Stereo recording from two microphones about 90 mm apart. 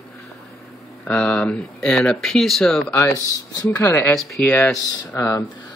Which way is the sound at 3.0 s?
40° left (ahead or behind).